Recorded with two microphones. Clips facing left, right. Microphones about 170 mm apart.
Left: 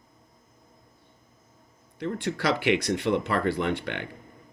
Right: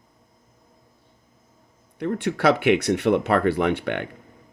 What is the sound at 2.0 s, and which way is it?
Speech, 60° right (ahead or behind).